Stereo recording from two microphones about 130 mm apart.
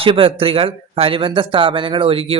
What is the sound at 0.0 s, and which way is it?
Speech, 45° right (ahead or behind).